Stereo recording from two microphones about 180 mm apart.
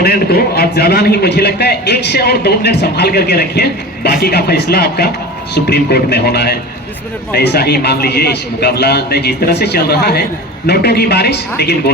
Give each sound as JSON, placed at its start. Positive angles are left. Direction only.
{"t": 0.0, "sound": "a man's voice", "side_deg": 60}